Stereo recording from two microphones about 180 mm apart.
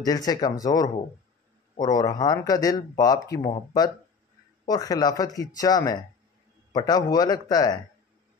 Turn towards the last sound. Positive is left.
turn(degrees=20)  # may be behind; listen again after turning